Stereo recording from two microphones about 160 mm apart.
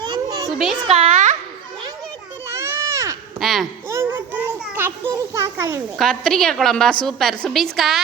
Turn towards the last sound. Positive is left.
turn(degrees=0)  # may be behind; listen again after turning